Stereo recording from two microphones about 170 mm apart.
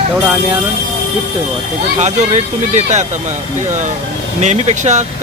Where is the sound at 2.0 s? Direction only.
45° right (ahead or behind).